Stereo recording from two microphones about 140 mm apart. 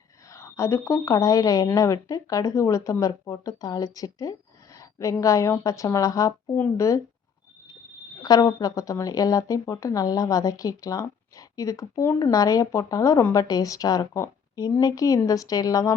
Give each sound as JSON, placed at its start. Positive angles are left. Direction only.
{"t": 0.3, "sound": "speech", "side_deg": 20}
{"t": 8.2, "sound": "speech", "side_deg": 30}